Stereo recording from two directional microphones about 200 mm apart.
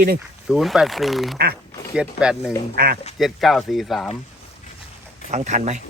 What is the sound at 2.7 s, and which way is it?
Speech, 45° right (ahead or behind).